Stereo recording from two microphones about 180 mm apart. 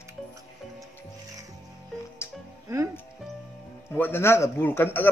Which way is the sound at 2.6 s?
15° right (ahead or behind).